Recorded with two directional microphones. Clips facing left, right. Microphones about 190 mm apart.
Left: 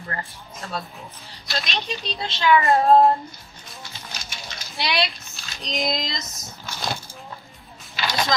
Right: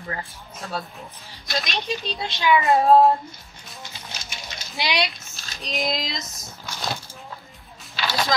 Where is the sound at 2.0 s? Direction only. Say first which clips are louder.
Left 3 dB; 10° right (ahead or behind).